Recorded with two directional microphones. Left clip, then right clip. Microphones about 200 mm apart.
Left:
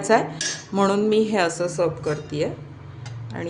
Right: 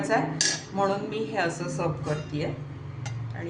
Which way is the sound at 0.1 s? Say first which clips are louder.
Left 6 dB; 55° left (ahead or behind).